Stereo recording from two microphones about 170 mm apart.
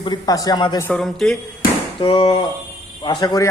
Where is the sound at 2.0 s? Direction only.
30° left (ahead or behind).